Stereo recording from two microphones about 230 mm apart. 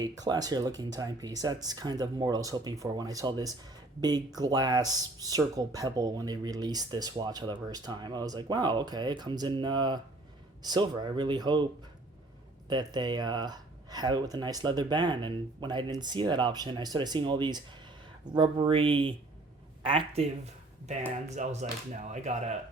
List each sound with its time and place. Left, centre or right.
0.0 s speech: centre
12.6 s speech: centre
21.2 s speech: right